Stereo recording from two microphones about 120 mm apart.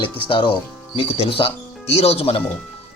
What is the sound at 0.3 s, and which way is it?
Speech, 45° left (ahead or behind).